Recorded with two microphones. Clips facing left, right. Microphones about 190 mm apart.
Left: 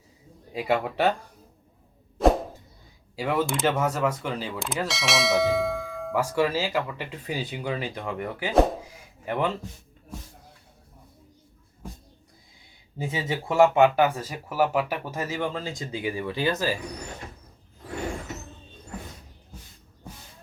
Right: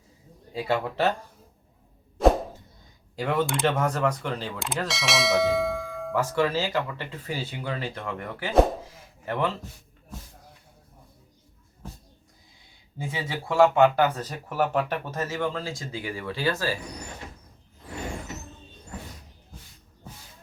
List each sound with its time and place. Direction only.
0.5 s speech: 15° left (ahead or behind)
3.2 s speech: 5° left (ahead or behind)
6.1 s speech: 10° left (ahead or behind)
13.0 s speech: 20° left (ahead or behind)